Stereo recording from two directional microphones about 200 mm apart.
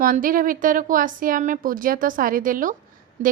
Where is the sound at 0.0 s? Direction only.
45° right (ahead or behind).